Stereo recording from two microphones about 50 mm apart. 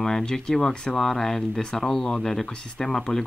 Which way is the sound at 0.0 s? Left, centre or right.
Centre.